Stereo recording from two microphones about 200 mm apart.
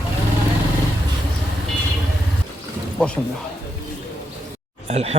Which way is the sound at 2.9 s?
5° left (ahead or behind).